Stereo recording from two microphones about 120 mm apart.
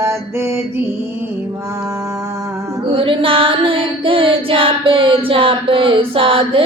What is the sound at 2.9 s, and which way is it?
Child singing, 50° right (ahead or behind).